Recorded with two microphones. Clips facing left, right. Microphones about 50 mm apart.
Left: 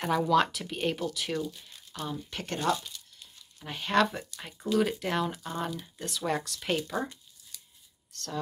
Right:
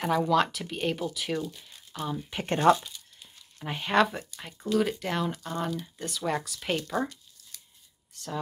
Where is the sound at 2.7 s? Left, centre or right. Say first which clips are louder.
Right 3 dB; centre.